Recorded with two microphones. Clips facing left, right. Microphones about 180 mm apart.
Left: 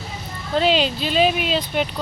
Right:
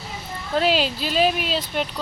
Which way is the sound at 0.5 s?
5° right (ahead or behind).